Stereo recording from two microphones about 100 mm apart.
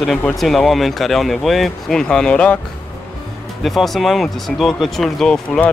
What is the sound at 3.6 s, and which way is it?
Speech, centre (ahead or behind).